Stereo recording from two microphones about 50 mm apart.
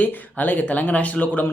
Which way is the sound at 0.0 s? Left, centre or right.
Left.